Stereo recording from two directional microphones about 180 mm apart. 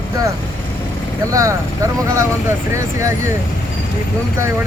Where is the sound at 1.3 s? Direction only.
15° right (ahead or behind).